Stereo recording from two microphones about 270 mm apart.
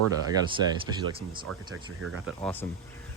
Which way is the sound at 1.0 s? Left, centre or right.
Centre.